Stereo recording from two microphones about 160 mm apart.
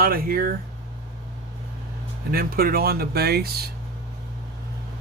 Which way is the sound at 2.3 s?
65° right (ahead or behind).